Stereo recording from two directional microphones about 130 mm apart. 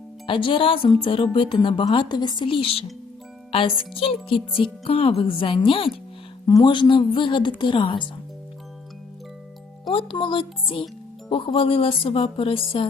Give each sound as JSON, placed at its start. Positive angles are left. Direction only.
{"t": 0.3, "sound": "a woman's voice", "side_deg": 40}
{"t": 6.4, "sound": "a woman's voice", "side_deg": 30}
{"t": 9.9, "sound": "speech", "side_deg": 45}